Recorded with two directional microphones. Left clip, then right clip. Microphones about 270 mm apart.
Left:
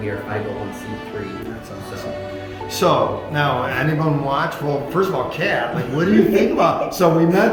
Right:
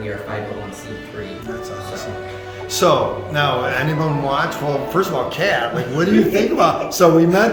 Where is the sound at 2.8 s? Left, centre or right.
Centre.